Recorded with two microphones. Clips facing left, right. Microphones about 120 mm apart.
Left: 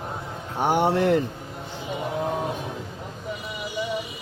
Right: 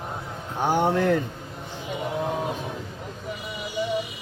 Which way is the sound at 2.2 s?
Centre (ahead or behind).